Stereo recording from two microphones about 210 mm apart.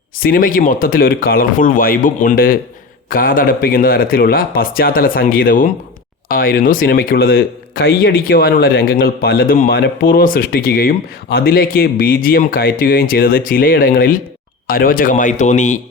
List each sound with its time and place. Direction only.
0.2 s speech: 45° left (ahead or behind)